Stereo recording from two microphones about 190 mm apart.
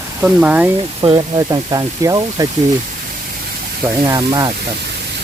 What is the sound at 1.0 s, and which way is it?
Speech, 20° right (ahead or behind).